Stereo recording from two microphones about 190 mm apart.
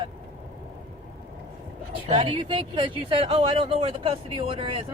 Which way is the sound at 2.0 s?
30° right (ahead or behind).